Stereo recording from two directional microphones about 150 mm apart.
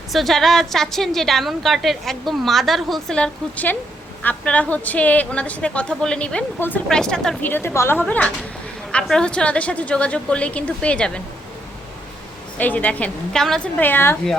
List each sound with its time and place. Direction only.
0.1 s a woman's voice: centre (ahead or behind)
7.5 s speech: 15° left (ahead or behind)
12.5 s speech: 10° left (ahead or behind)
13.8 s speech: 15° left (ahead or behind)